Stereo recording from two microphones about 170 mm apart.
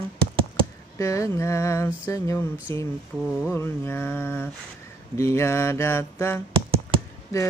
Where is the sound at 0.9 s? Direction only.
20° left (ahead or behind).